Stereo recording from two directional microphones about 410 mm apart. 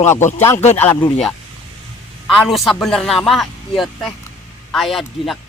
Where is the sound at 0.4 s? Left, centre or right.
Centre.